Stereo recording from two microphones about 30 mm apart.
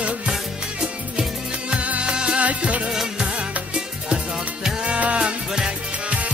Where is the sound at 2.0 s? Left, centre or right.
Right.